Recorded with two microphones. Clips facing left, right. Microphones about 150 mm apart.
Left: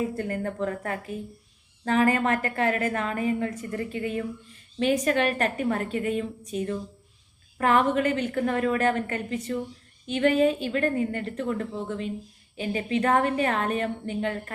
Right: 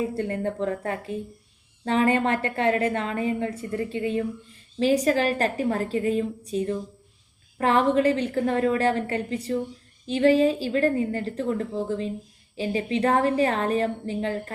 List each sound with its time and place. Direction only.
0.1 s a woman's voice: 30° right (ahead or behind)